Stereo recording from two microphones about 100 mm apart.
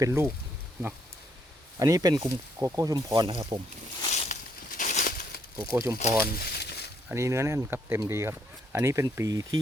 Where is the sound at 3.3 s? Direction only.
70° right (ahead or behind).